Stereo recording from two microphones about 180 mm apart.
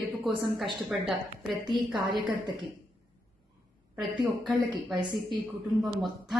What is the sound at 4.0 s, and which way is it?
A woman's voice, 25° right (ahead or behind).